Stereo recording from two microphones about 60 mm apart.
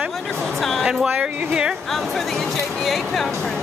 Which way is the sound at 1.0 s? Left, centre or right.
Centre.